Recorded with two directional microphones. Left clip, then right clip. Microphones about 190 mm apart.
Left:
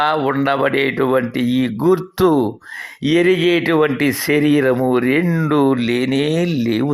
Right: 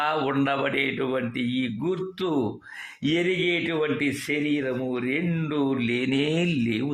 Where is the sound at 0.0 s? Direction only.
20° left (ahead or behind); by 2.4 s 40° left (ahead or behind).